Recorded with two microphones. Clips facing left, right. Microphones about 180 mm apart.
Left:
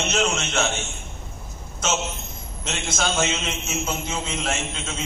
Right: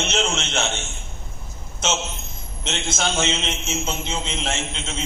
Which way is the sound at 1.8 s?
25° right (ahead or behind).